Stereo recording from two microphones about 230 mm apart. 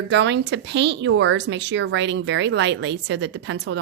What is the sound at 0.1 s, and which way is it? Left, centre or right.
Speech, right.